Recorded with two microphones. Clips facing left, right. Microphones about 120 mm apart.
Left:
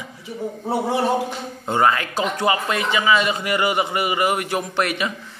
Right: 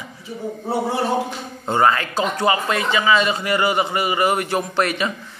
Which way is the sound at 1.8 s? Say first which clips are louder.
Right 1 dB; 15° left (ahead or behind).